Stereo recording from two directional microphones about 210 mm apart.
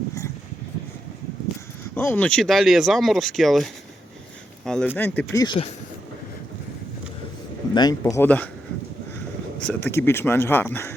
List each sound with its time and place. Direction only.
2.0 s speech: 10° left (ahead or behind)
7.7 s speech: 20° left (ahead or behind)
9.6 s speech: 10° left (ahead or behind)